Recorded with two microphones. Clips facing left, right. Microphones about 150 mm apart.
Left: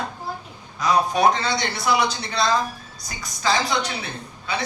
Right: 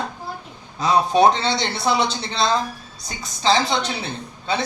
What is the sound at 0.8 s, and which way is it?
A woman's voice, 25° right (ahead or behind).